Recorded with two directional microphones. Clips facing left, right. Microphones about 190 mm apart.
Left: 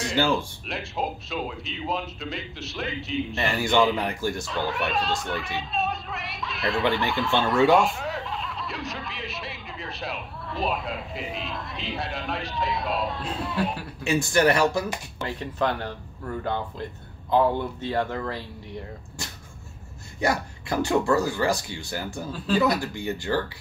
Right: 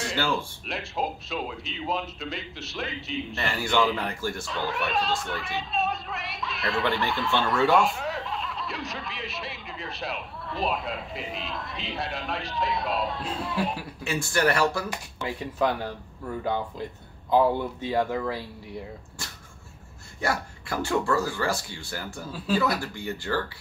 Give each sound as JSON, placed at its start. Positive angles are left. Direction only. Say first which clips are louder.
{"t": 0.2, "sound": "speech", "louder": "left 5 dB", "side_deg": 20}
{"t": 0.7, "sound": "speech", "louder": "even", "side_deg": 0}
{"t": 4.0, "sound": "speech", "louder": "left 3 dB", "side_deg": 15}
{"t": 4.5, "sound": "speech", "louder": "left 2 dB", "side_deg": 0}
{"t": 14.0, "sound": "speech", "louder": "left 4 dB", "side_deg": 20}
{"t": 15.2, "sound": "speech", "louder": "even", "side_deg": -10}
{"t": 20.2, "sound": "speech", "louder": "left 3 dB", "side_deg": 20}